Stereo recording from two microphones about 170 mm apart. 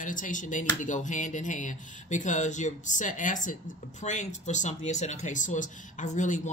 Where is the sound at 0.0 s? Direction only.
50° left (ahead or behind).